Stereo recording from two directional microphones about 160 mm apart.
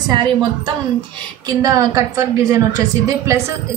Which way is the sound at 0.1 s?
30° right (ahead or behind).